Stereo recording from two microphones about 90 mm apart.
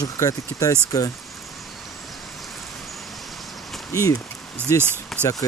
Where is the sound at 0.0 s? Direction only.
40° left (ahead or behind).